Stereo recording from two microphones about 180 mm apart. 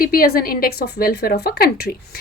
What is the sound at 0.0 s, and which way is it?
A woman's voice, 55° left (ahead or behind).